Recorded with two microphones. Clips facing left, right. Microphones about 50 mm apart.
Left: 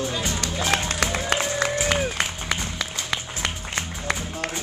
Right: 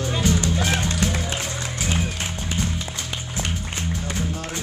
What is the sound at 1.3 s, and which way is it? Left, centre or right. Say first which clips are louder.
Music: left 6 dB; left.